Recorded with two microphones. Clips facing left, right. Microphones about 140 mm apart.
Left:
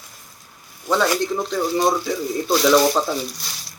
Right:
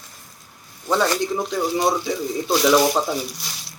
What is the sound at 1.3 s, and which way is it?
Speech, 10° right (ahead or behind).